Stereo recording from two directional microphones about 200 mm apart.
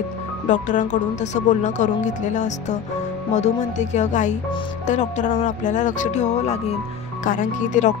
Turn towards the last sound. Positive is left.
turn(degrees=40)  # may be behind; listen again after turning